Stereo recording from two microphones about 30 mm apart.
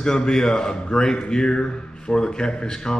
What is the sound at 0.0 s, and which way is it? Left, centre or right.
Speech, left.